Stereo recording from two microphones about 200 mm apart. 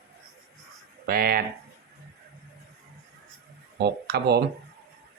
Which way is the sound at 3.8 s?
55° right (ahead or behind).